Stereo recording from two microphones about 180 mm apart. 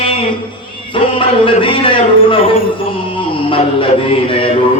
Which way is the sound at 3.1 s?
30° left (ahead or behind).